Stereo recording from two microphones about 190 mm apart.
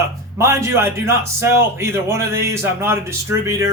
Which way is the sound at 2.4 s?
15° right (ahead or behind).